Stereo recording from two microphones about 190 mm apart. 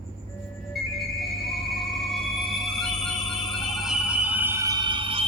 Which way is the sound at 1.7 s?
Centre (ahead or behind).